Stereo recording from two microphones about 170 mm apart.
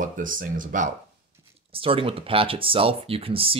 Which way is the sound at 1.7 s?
35° right (ahead or behind).